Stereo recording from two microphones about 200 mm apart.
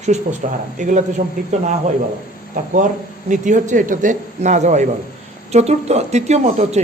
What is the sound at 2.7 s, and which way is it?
Speech, 40° right (ahead or behind).